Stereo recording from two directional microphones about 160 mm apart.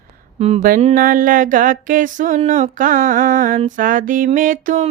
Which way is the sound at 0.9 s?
60° right (ahead or behind).